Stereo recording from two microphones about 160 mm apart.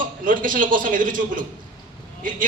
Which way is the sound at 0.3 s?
55° right (ahead or behind).